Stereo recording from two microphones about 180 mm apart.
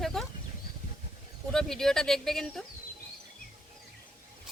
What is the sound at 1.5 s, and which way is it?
Speech, 5° left (ahead or behind).